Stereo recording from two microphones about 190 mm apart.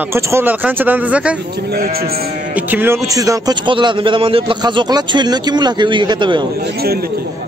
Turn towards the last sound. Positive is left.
turn(degrees=-55)  # may be behind; listen again after turning